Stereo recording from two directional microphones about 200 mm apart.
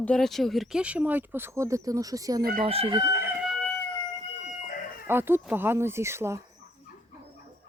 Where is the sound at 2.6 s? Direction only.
30° right (ahead or behind).